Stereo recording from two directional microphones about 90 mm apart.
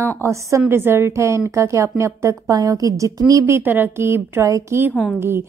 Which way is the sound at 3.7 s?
25° right (ahead or behind).